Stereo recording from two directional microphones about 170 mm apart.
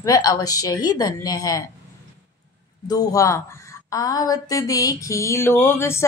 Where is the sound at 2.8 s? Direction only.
20° left (ahead or behind).